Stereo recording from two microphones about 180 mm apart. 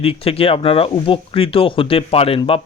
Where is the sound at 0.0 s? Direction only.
30° left (ahead or behind).